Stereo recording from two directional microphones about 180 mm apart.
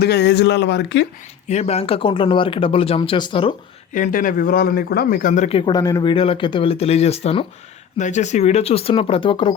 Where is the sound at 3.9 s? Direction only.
45° left (ahead or behind).